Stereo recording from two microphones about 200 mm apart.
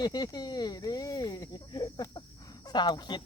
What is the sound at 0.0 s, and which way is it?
Speech, 20° left (ahead or behind).